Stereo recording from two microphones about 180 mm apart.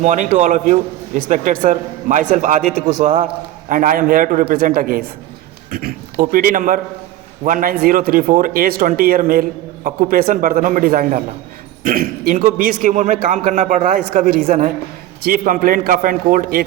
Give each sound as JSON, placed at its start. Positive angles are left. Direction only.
{"t": 0.0, "sound": "speech", "side_deg": -45}